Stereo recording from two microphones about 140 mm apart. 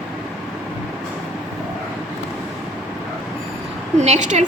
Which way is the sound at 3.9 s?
55° right (ahead or behind).